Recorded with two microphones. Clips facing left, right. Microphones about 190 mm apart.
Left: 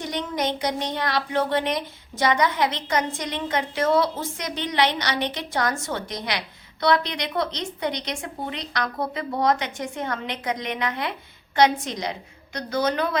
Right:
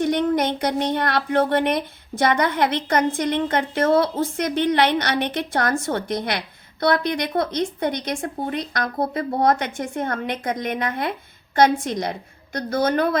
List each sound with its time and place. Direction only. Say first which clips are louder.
0.0 s a woman's voice: right 7 dB; 60° right (ahead or behind)